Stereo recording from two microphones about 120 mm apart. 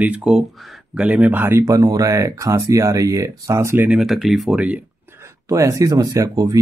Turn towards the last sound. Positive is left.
turn(degrees=-30)  # may be behind; listen again after turning